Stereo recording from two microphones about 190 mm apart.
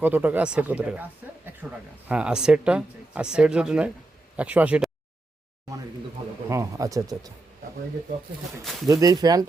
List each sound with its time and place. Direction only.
0.0 s speech: 10° right (ahead or behind)
6.5 s speech: 15° right (ahead or behind)
8.9 s speech: 20° right (ahead or behind)